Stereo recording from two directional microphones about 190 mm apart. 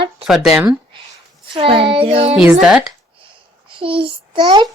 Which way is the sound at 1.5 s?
30° right (ahead or behind).